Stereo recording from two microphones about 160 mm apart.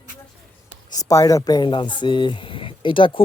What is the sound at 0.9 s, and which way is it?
Speech, 20° left (ahead or behind).